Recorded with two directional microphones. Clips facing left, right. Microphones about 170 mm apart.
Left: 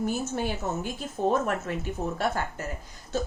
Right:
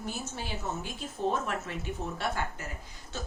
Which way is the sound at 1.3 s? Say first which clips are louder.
Left 6 dB; 45° left (ahead or behind).